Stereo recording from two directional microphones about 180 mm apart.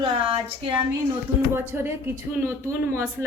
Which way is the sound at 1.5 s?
10° right (ahead or behind).